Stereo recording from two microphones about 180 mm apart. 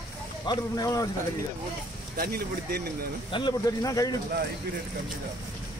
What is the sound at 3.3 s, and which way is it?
Speech, 20° left (ahead or behind).